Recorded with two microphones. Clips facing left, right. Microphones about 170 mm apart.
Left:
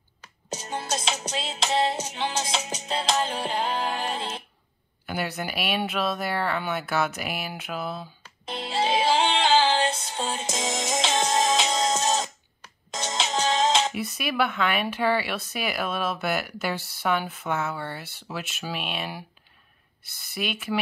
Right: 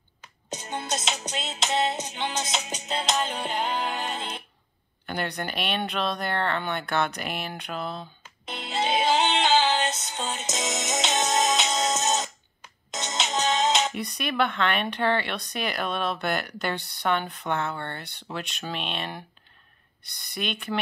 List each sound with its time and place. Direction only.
0.7 s music: 35° left (ahead or behind)
5.0 s speech: 5° left (ahead or behind)
8.5 s music: 30° left (ahead or behind)
13.9 s speech: 5° left (ahead or behind)